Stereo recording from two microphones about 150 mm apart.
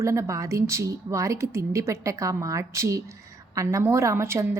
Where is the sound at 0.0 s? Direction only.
20° right (ahead or behind).